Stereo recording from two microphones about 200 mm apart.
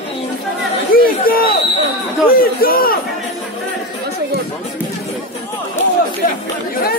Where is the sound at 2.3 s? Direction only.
45° left (ahead or behind).